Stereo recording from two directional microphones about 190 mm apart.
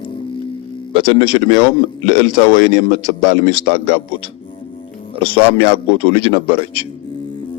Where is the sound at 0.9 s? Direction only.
25° right (ahead or behind).